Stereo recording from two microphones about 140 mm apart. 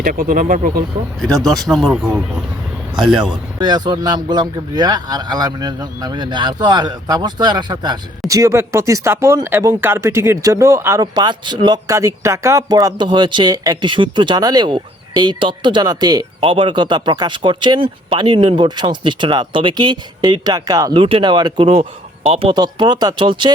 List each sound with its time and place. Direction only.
0.0 s speech: 75° right (ahead or behind)
1.6 s speech: centre (ahead or behind)
3.6 s speech: 30° right (ahead or behind)
21.8 s speech: 45° right (ahead or behind)